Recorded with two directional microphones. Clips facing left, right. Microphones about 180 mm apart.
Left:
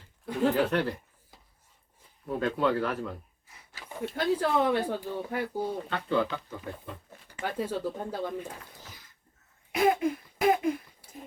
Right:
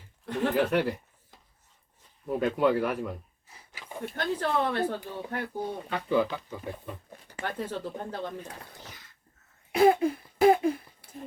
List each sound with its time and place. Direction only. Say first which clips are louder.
0.3 s speech: left 2 dB; 10° left (ahead or behind)
0.7 s speech: right 2 dB; 10° right (ahead or behind)
2.3 s speech: right 2 dB; 10° right (ahead or behind)
3.7 s a sound: left 2 dB; 10° right (ahead or behind)
4.1 s speech: left 2 dB; 10° left (ahead or behind)
5.9 s speech: right 4 dB; 10° right (ahead or behind)
7.4 s speech: left 3 dB; 10° left (ahead or behind)
8.9 s a sound: right 1 dB; 75° right (ahead or behind)
9.7 s a sound: right 4 dB; 30° right (ahead or behind)